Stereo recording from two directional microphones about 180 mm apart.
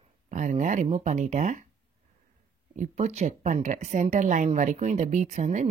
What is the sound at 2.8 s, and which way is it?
Speech, 40° right (ahead or behind).